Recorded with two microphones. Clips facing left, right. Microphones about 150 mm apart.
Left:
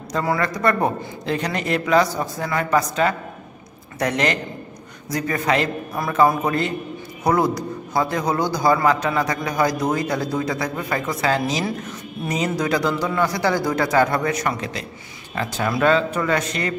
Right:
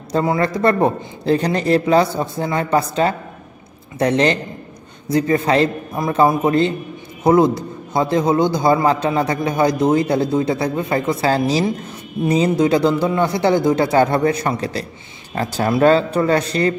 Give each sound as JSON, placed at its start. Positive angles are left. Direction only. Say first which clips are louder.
{"t": 0.1, "sound": "a man's voice", "louder": "right 5 dB", "side_deg": -25}